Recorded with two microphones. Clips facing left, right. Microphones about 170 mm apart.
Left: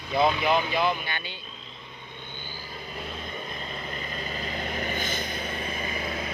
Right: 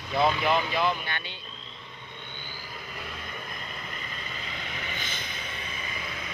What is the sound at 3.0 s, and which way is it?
Vehicle, 25° left (ahead or behind).